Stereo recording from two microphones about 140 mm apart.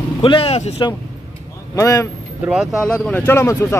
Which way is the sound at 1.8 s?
25° left (ahead or behind).